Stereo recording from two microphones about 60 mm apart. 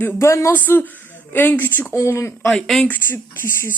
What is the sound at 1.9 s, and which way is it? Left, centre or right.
Speech, left.